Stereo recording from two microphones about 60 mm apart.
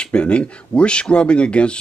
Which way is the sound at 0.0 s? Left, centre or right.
Centre.